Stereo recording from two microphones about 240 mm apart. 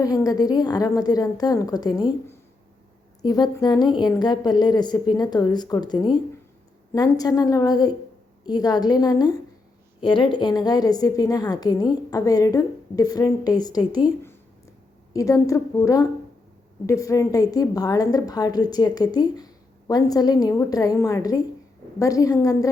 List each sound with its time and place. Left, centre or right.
0.0 s a woman's voice: centre
3.2 s a woman's voice: centre